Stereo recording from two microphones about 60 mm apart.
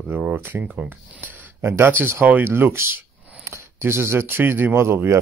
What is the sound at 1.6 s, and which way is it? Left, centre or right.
Speech, right.